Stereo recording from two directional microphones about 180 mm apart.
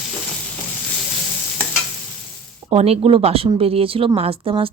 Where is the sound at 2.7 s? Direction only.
35° right (ahead or behind).